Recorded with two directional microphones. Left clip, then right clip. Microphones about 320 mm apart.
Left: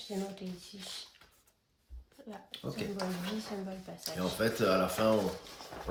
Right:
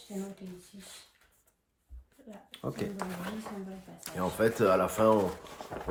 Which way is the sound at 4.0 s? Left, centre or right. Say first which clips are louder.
Right 4 dB; centre.